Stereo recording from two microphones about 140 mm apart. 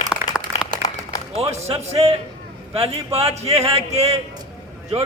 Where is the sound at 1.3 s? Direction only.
50° right (ahead or behind).